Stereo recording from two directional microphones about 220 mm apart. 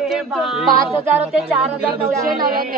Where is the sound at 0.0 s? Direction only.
Centre (ahead or behind).